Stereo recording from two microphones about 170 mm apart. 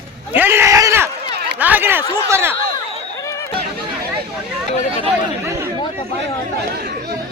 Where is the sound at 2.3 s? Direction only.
15° right (ahead or behind).